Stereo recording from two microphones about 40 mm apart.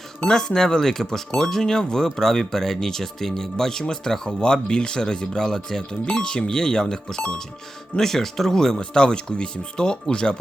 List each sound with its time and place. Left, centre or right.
0.3 s speech: centre